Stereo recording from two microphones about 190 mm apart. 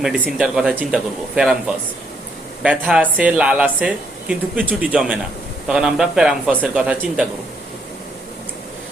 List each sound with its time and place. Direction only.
0.0 s a man's voice: 5° right (ahead or behind)